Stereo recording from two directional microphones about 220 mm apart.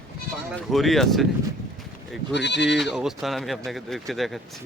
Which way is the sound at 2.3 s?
50° left (ahead or behind).